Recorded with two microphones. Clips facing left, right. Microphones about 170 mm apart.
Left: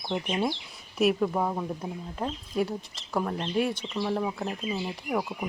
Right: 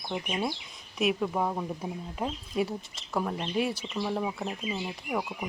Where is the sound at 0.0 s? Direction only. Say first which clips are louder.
Left 3 dB; 20° left (ahead or behind).